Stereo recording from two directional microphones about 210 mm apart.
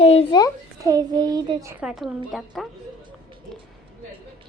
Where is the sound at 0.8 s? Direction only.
15° right (ahead or behind).